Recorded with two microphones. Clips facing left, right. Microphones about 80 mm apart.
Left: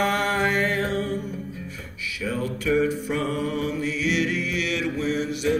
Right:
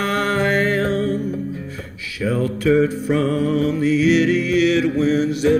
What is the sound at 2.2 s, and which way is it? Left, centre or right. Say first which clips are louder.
Music: right 8 dB; right.